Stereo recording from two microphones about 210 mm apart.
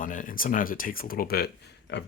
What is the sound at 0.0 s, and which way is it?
Speech, 40° left (ahead or behind).